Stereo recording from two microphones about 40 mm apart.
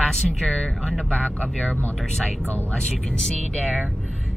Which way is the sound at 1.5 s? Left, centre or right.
Centre.